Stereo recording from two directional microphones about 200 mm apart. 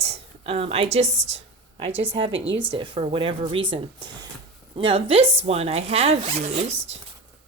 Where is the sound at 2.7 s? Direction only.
25° right (ahead or behind).